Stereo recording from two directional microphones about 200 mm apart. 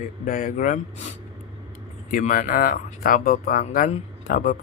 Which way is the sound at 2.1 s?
40° left (ahead or behind).